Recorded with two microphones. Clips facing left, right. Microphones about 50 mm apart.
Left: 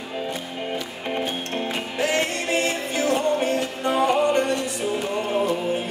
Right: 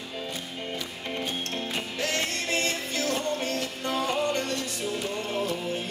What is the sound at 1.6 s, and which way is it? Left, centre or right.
Music, left.